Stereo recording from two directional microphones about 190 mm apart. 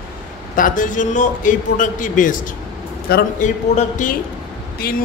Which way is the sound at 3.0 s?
55° left (ahead or behind).